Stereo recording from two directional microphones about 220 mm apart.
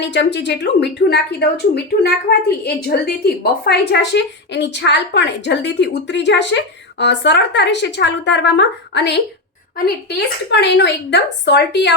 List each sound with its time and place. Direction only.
0.0 s a woman's voice: 55° left (ahead or behind)